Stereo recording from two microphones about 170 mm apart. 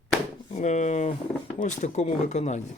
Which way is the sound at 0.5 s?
45° left (ahead or behind).